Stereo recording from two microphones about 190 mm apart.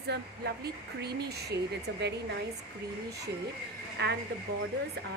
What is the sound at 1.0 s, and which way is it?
Speech, 60° right (ahead or behind).